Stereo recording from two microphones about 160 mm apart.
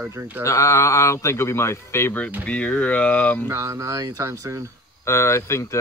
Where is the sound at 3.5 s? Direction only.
20° right (ahead or behind).